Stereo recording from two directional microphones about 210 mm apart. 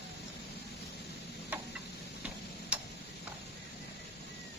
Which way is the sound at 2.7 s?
5° right (ahead or behind).